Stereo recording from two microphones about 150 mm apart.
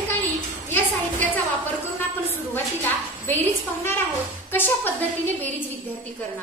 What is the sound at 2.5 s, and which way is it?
A woman's voice, 15° left (ahead or behind).